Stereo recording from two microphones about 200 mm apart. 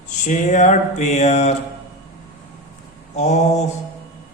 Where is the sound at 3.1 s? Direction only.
35° left (ahead or behind).